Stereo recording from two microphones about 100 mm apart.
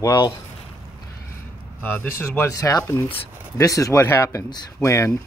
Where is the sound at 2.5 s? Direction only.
35° left (ahead or behind).